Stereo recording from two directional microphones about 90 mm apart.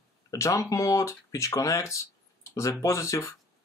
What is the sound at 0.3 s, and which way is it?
Speech, 35° left (ahead or behind).